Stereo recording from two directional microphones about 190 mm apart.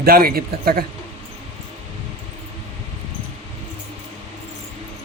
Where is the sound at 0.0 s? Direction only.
50° right (ahead or behind).